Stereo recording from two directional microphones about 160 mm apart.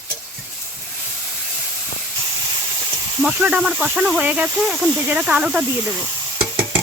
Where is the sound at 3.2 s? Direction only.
5° right (ahead or behind).